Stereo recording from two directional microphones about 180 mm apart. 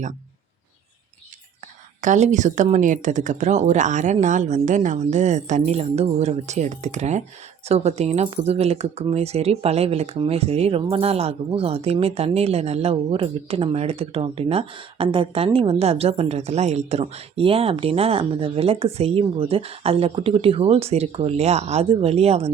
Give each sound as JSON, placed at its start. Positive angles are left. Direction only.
{"t": 2.0, "sound": "a woman's voice", "side_deg": -40}